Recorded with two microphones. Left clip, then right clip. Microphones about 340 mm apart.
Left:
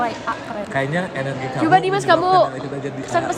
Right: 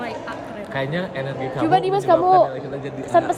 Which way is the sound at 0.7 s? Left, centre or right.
Centre.